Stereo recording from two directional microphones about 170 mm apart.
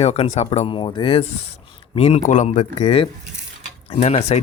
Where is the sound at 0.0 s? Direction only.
40° left (ahead or behind).